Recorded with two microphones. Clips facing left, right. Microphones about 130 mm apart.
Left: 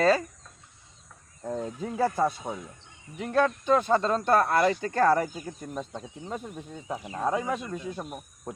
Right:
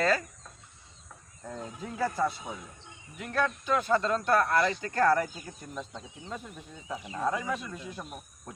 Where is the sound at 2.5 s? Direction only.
40° left (ahead or behind).